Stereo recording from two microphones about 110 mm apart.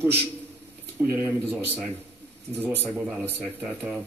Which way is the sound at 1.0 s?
15° right (ahead or behind).